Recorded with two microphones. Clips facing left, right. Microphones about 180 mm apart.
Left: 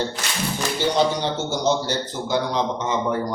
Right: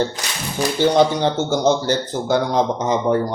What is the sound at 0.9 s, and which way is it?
A man's voice, 55° right (ahead or behind).